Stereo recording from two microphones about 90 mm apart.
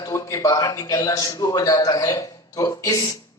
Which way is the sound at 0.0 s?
35° left (ahead or behind).